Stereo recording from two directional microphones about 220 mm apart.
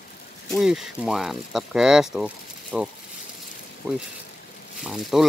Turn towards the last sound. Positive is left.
turn(degrees=0)  # may be behind; listen again after turning